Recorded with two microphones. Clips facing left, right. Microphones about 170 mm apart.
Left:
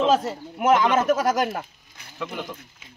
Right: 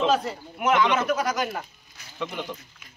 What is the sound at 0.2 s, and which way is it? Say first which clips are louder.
Speech: left 3 dB; 40° left (ahead or behind).